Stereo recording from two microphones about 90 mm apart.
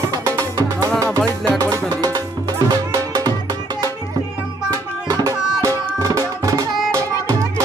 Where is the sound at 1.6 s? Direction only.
45° right (ahead or behind).